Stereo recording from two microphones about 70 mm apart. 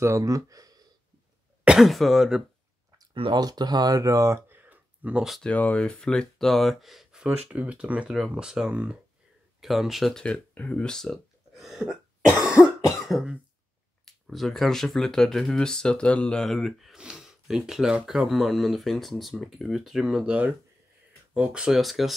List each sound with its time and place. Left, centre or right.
0.0 s speech: right
1.8 s speech: centre
3.0 s speech: right
5.1 s speech: centre
5.4 s speech: left; by 10.1 s centre
10.1 s speech: centre
10.5 s throat clearing: left; by 12.4 s centre
12.4 s cough: centre
12.9 s cough: centre
14.0 s speech: centre
16.4 s speech: centre
20.2 s speech: right; by 22.1 s centre